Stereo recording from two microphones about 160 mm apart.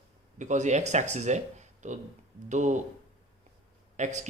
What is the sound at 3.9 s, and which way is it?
Speech, 50° right (ahead or behind).